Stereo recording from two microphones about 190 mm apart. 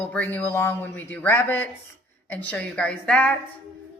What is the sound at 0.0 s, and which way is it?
Speech, 10° left (ahead or behind).